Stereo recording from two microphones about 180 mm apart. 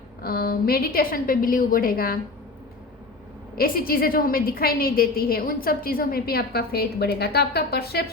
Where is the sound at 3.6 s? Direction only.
55° left (ahead or behind).